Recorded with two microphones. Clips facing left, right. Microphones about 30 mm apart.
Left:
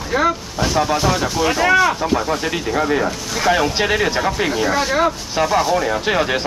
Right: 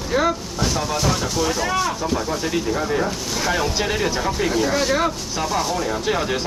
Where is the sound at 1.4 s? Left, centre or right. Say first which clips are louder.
Left 8 dB; left.